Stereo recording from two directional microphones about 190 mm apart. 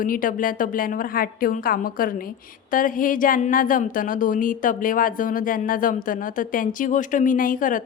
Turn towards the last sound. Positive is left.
turn(degrees=45)  # may be behind; listen again after turning